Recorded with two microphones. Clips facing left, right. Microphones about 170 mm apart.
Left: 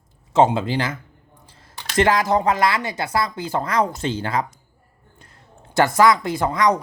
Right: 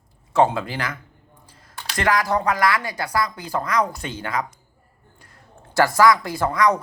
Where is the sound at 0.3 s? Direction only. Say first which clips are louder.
Left 2 dB; 20° left (ahead or behind).